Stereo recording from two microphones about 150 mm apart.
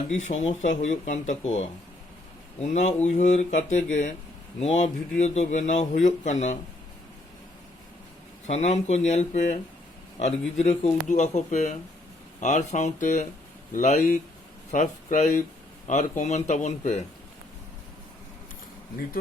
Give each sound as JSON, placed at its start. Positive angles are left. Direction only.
{"t": 0.1, "sound": "speech", "side_deg": 55}
{"t": 8.4, "sound": "speech", "side_deg": 50}